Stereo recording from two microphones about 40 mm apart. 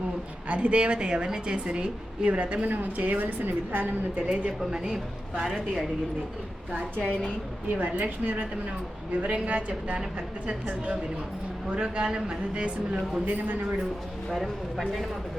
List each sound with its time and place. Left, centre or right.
0.4 s a woman's voice: right
2.6 s a woman's voice: right
4.3 s a woman's voice: right
5.4 s speech: centre
7.0 s a woman's voice: centre
7.7 s a woman's voice: right
11.7 s a woman's voice: right
13.2 s a woman's voice: right
14.3 s speech: centre